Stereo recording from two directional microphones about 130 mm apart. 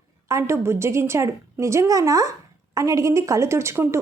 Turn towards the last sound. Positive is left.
turn(degrees=-20)  # may be behind; listen again after turning